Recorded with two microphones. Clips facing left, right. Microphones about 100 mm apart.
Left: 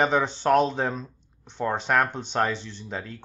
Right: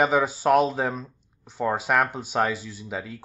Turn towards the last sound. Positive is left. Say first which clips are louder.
# right 1 dB
turn(degrees=-5)  # may be behind; listen again after turning